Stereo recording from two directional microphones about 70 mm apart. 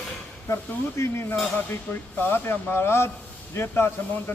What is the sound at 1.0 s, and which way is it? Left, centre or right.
A man's voice, left.